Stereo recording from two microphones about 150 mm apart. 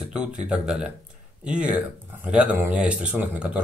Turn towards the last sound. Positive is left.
turn(degrees=-5)  # may be behind; listen again after turning